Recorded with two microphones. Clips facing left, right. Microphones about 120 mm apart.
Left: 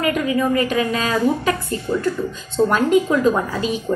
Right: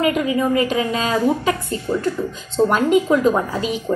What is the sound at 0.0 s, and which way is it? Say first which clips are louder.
A woman's voice: right 1 dB; 20° right (ahead or behind).